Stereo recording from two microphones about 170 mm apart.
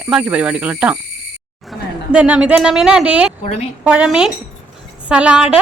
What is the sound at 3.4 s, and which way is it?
Speech, 35° left (ahead or behind).